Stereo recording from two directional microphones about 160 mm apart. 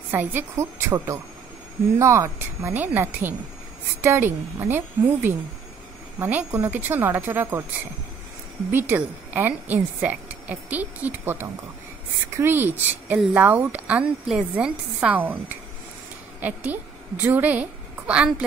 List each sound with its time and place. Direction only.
0.1 s a woman's voice: 10° right (ahead or behind)
8.7 s a woman's voice: 10° right (ahead or behind)